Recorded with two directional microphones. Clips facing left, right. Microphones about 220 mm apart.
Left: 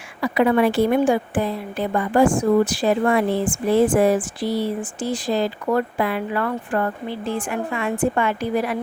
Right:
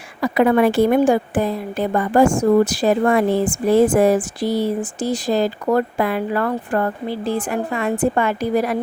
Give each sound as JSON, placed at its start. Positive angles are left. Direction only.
{"t": 0.2, "sound": "a woman's voice", "side_deg": -45}